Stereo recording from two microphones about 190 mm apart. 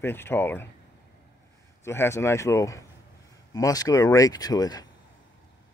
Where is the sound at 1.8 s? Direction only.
15° left (ahead or behind).